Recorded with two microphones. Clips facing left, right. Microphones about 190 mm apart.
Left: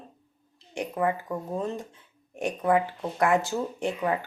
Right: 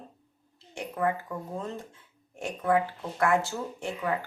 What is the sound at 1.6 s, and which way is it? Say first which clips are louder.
Speech: left 5 dB; 15° left (ahead or behind).